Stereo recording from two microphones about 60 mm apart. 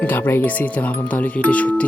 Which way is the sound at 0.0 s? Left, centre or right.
Left.